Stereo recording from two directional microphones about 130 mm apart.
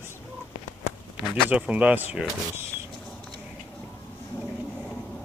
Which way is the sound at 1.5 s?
10° right (ahead or behind).